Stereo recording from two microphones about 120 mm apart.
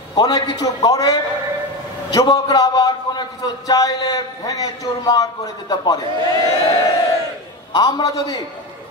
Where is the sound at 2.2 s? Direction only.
30° left (ahead or behind).